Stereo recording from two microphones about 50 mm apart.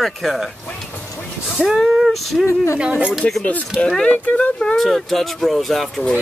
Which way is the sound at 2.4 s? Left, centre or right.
Left.